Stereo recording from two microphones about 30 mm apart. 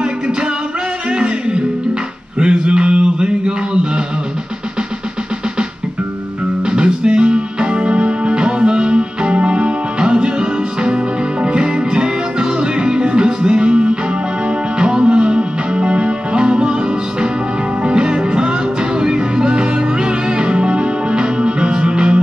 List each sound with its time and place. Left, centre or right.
1.1 s music: right
2.3 s a sound: right
6.6 s music: right